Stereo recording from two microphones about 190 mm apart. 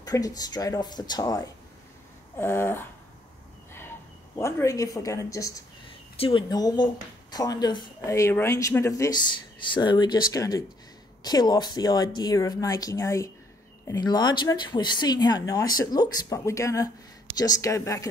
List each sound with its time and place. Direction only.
0.0 s speech: 20° left (ahead or behind)
4.4 s speech: 15° left (ahead or behind)
6.1 s speech: 30° left (ahead or behind)